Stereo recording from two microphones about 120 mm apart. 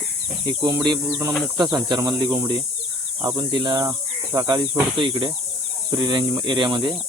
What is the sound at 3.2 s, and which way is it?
Speech, 40° right (ahead or behind).